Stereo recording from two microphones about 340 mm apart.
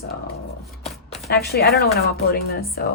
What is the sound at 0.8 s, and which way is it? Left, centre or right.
Chopping, centre.